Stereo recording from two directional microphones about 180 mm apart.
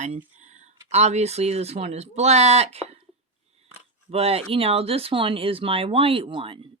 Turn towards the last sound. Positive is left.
turn(degrees=-30)  # may be behind; listen again after turning